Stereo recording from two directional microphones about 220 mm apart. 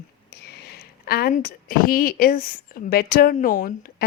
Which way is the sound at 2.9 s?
40° left (ahead or behind).